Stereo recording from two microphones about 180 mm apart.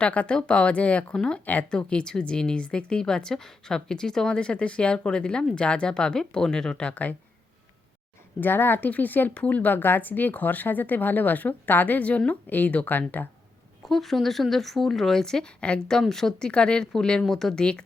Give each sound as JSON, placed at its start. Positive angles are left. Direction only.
{"t": 0.0, "sound": "speech", "side_deg": 5}
{"t": 8.4, "sound": "a woman's voice", "side_deg": 10}